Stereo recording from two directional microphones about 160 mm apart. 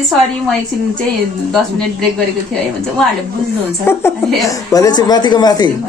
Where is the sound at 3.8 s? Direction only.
15° left (ahead or behind).